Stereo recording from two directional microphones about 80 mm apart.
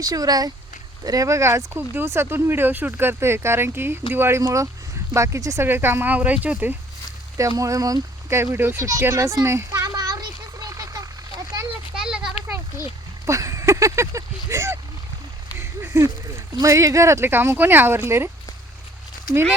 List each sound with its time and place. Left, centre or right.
0.0 s speech: right
5.6 s speech: right
7.3 s speech: right
8.8 s speech: right
9.8 s a sound: right
11.9 s children playing: centre
13.2 s a sound: right
15.9 s speech: right